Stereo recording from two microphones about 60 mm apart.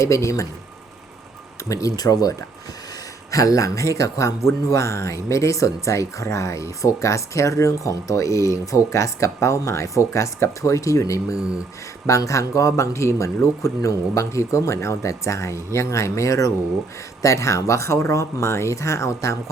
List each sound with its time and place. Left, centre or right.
0.0 s speech: left
1.7 s speech: left
3.3 s speech: left